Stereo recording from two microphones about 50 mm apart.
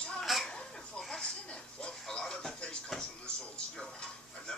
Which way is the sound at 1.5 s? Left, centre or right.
Centre.